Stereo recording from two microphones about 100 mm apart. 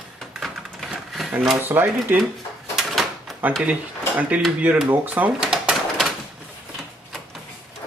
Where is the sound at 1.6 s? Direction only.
20° right (ahead or behind).